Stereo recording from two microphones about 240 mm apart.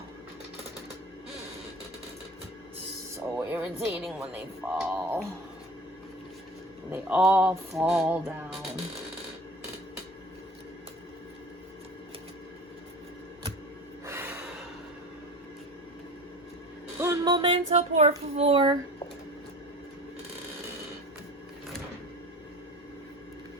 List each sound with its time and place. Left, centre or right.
3.3 s music: centre
6.9 s music: centre
14.0 s gasp: centre
17.2 s music: right